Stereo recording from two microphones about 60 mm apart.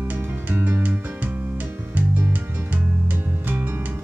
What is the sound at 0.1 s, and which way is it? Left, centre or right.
Music, right.